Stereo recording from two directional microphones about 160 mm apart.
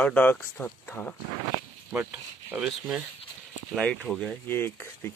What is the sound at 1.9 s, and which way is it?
Speech, 10° right (ahead or behind).